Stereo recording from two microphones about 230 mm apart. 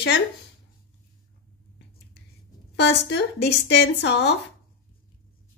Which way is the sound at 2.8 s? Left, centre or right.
Left.